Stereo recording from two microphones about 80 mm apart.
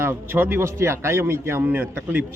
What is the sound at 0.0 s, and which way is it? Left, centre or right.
Speech, right.